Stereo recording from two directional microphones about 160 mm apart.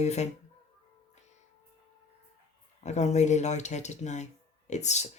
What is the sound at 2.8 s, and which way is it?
Speech, 45° left (ahead or behind).